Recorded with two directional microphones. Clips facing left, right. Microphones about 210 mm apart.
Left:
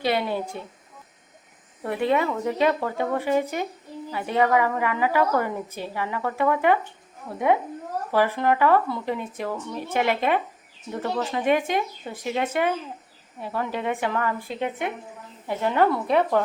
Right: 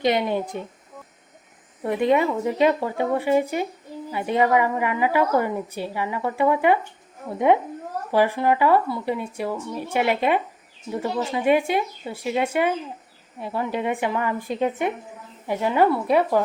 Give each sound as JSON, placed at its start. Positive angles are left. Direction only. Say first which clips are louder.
{"t": 0.0, "sound": "a woman's voice", "louder": "right 3 dB", "side_deg": -15}
{"t": 1.8, "sound": "a woman's voice", "louder": "right 3 dB", "side_deg": -15}
{"t": 7.3, "sound": "speech", "louder": "right 3 dB", "side_deg": -25}
{"t": 8.1, "sound": "a woman's voice", "louder": "right 2 dB", "side_deg": -15}
{"t": 15.4, "sound": "a woman's voice", "louder": "right 2 dB", "side_deg": -10}